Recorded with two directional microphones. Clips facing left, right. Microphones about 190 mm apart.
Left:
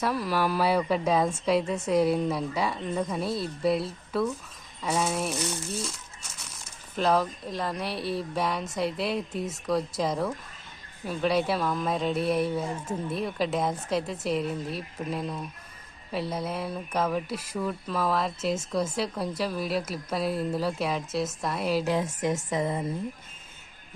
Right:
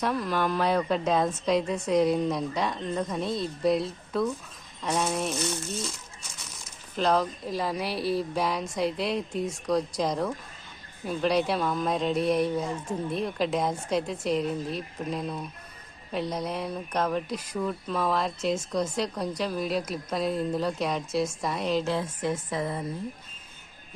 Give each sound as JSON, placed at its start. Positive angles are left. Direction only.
{"t": 0.0, "sound": "a woman's voice", "side_deg": 5}
{"t": 6.9, "sound": "a woman's voice", "side_deg": 0}
{"t": 22.4, "sound": "a woman's voice", "side_deg": 25}